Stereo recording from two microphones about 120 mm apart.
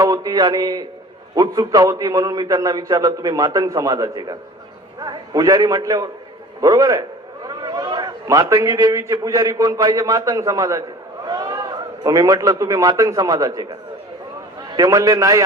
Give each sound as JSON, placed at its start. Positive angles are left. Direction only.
{"t": 0.0, "sound": "a man's voice", "side_deg": -30}
{"t": 7.4, "sound": "a sound", "side_deg": -35}
{"t": 9.2, "sound": "a man's voice", "side_deg": -30}
{"t": 14.7, "sound": "a man's voice", "side_deg": -30}